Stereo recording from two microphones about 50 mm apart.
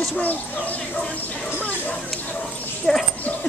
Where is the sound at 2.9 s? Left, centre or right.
Centre.